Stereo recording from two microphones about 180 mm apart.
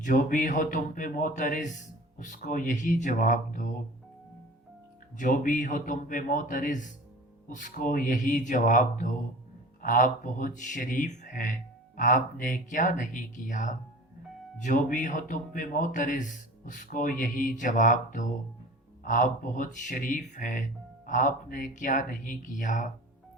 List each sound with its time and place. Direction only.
0.0 s speech: 45° left (ahead or behind)
5.1 s speech: 50° left (ahead or behind)